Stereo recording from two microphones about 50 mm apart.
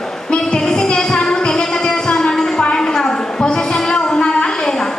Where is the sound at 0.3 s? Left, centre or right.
Centre.